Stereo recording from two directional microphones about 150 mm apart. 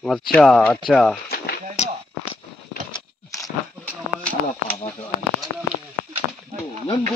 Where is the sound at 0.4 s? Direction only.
5° left (ahead or behind).